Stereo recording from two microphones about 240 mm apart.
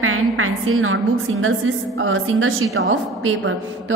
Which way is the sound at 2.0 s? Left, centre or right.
Right.